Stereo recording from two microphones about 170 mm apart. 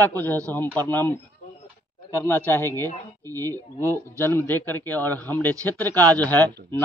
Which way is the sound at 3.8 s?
15° right (ahead or behind).